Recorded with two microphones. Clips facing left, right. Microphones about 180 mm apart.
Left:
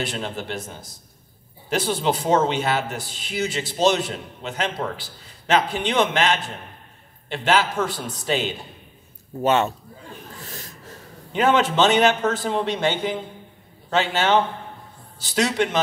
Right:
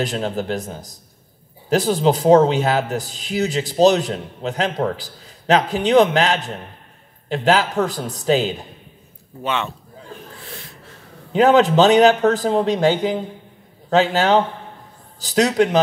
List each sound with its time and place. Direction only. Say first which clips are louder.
0.0 s a man's voice: right 6 dB; 40° right (ahead or behind)
9.4 s a man's voice: left 5 dB; 40° left (ahead or behind)
10.4 s a sound: right 1 dB; 40° left (ahead or behind)
11.3 s a man's voice: right 6 dB; 40° right (ahead or behind)